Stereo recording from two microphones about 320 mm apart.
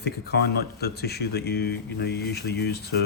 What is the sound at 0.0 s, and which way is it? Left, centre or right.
Speech, left.